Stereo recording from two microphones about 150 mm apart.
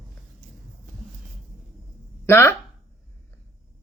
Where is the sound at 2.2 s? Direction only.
15° left (ahead or behind).